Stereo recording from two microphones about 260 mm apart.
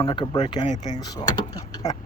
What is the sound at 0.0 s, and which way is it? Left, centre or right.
Speech, centre.